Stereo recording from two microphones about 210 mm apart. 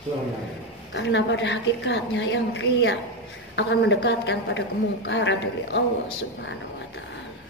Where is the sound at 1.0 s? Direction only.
60° left (ahead or behind).